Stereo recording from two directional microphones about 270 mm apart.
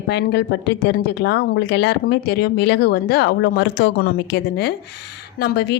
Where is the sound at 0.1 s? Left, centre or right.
Left.